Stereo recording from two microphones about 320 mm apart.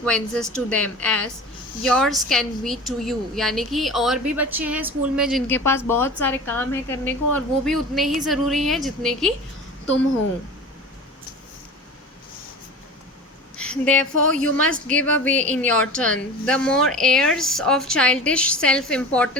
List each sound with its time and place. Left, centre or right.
0.0 s a woman's voice: centre
13.6 s a woman's voice: centre